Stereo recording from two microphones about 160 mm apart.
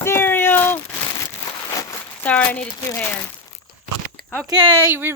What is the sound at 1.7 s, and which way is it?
Crumpling, 20° left (ahead or behind).